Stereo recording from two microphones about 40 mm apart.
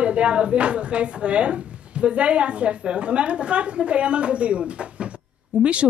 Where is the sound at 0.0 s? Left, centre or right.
Right.